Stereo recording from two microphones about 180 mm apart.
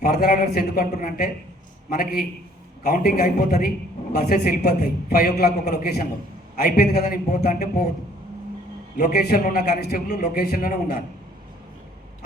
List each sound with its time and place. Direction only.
0.0 s a man's voice: 55° left (ahead or behind)
9.0 s a man's voice: 55° left (ahead or behind)